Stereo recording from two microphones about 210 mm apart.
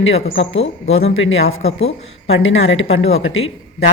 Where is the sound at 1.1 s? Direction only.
70° left (ahead or behind).